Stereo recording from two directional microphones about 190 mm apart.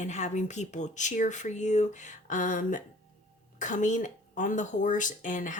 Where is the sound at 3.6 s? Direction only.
40° left (ahead or behind).